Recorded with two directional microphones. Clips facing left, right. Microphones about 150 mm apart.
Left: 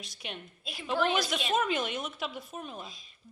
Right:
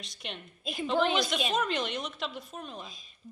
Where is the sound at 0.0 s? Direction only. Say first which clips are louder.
Even; 5° left (ahead or behind).